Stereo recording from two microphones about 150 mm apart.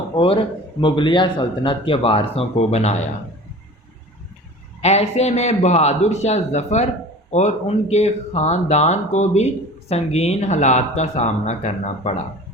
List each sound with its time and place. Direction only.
0.8 s speech: 35° left (ahead or behind)
4.8 s speech: 45° left (ahead or behind)